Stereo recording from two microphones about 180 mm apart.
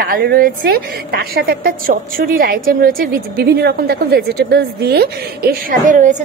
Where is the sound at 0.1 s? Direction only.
55° right (ahead or behind).